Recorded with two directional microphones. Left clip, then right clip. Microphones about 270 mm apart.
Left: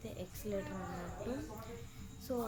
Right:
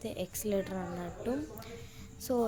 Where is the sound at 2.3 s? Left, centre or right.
Right.